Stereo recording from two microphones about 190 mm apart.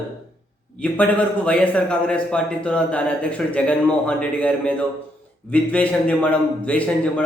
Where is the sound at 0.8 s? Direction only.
5° left (ahead or behind).